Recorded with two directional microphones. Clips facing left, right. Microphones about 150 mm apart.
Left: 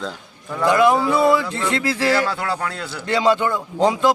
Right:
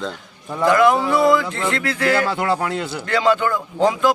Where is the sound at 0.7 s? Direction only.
20° left (ahead or behind).